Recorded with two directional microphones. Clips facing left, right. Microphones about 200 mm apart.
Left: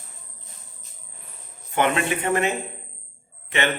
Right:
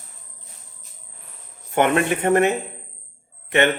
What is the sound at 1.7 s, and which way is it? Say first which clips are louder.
Speech: right 4 dB; 55° right (ahead or behind).